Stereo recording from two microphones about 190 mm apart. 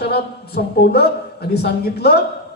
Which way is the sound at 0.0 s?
60° left (ahead or behind).